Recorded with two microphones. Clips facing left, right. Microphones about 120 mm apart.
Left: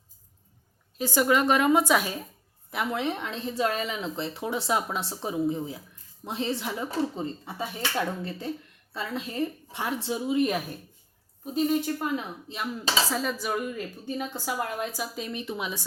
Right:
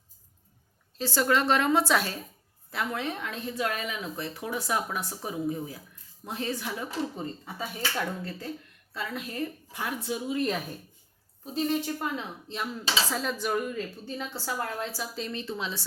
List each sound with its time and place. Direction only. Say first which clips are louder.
0.9 s speech: left 2 dB; 15° left (ahead or behind)
14.0 s speech: left 3 dB; 15° left (ahead or behind)